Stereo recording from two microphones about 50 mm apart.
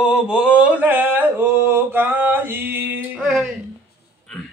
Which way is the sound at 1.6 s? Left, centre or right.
Right.